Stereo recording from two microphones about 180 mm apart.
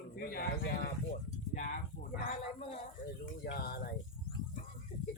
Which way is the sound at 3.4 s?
60° left (ahead or behind).